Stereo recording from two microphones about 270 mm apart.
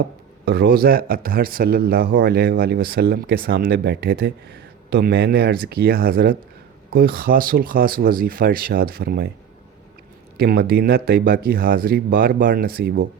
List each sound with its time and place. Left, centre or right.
0.0 s speech: right
10.3 s speech: right